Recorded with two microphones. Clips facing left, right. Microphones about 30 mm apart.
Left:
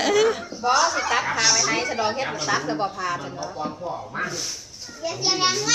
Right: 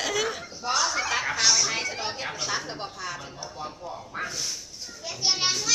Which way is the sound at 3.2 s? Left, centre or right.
Left.